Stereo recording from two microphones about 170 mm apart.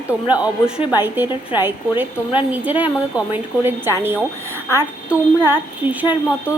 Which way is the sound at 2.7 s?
10° right (ahead or behind).